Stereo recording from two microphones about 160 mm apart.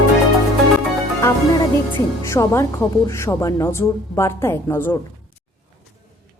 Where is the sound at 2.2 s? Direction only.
20° left (ahead or behind).